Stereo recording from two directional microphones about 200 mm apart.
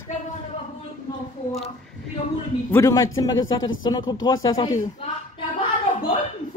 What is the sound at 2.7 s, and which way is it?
A man's voice, 15° left (ahead or behind).